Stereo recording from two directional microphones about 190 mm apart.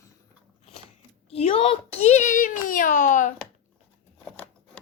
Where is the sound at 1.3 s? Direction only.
30° left (ahead or behind).